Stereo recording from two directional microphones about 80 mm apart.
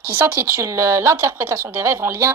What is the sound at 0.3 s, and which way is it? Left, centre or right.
Speech, right.